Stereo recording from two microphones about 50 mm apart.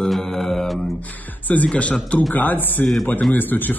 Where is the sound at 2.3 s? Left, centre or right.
Left.